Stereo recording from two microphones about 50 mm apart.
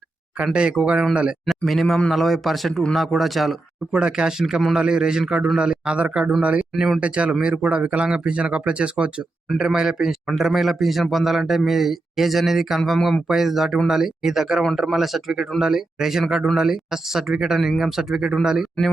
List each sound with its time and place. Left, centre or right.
0.4 s speech: centre
1.6 s a man's voice: centre
3.9 s a man's voice: centre